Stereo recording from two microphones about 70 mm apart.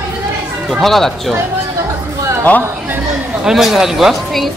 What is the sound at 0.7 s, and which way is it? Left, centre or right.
Speech, centre.